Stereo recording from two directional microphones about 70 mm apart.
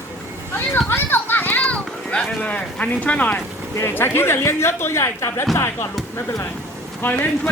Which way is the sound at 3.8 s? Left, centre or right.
Left.